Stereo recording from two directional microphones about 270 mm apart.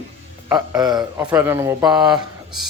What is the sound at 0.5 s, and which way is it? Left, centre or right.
Speech, centre.